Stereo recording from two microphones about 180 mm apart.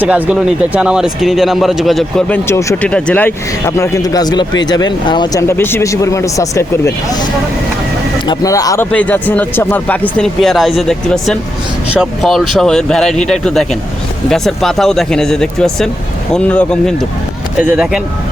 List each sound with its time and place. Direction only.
0.0 s speech: 5° right (ahead or behind)
2.5 s speech: 15° left (ahead or behind)
8.3 s speech: 20° left (ahead or behind)
17.6 s speech: 5° right (ahead or behind)